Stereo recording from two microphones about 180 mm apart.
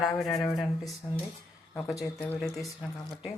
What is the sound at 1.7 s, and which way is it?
Speech, 15° left (ahead or behind).